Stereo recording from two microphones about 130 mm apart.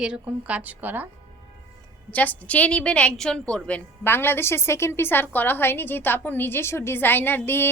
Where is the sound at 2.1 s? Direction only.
10° left (ahead or behind).